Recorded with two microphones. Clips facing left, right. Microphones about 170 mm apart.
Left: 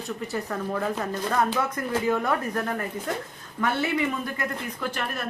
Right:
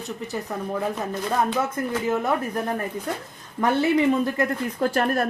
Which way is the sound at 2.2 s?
20° right (ahead or behind).